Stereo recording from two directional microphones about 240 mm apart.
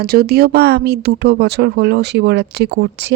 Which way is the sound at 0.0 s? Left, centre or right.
Right.